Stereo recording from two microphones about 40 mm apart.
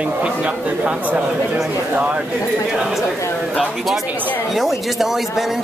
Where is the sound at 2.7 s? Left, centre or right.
Centre.